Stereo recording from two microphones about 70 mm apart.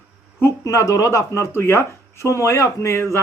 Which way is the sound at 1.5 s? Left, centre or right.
Left.